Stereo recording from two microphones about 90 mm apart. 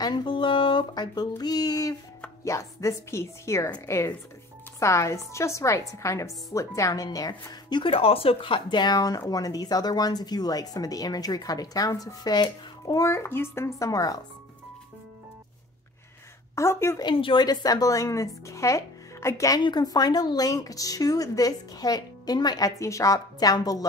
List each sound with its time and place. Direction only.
0.0 s a sound: 60° left (ahead or behind); by 2.0 s 40° left (ahead or behind)
2.4 s speech: 35° left (ahead or behind)
7.8 s speech: 90° left; by 14.2 s 40° left (ahead or behind)
16.5 s speech: 30° left (ahead or behind)
17.0 s speech: 70° left (ahead or behind)
17.5 s speech: 45° left (ahead or behind)
19.6 s speech: 50° left (ahead or behind)
22.8 s speech: 35° left (ahead or behind)